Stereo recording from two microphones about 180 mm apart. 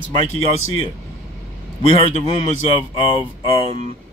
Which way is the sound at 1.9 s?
35° left (ahead or behind).